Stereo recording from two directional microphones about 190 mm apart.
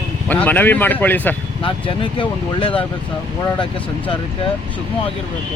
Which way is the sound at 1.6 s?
25° left (ahead or behind).